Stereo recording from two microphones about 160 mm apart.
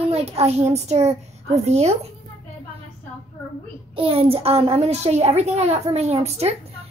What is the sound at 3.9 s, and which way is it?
A child's voice, 35° right (ahead or behind).